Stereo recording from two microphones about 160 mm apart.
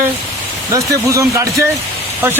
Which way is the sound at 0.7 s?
20° right (ahead or behind).